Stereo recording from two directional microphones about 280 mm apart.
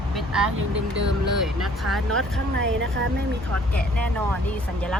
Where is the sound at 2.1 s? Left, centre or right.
Right.